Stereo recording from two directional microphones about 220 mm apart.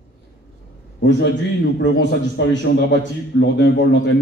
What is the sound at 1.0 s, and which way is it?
A man's voice, 50° left (ahead or behind).